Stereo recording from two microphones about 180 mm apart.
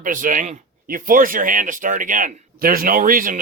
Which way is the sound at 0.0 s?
50° right (ahead or behind).